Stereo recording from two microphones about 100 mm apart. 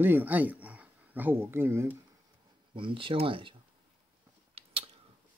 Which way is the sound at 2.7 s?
60° right (ahead or behind).